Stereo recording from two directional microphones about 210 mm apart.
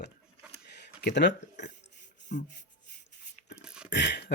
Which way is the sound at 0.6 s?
55° left (ahead or behind).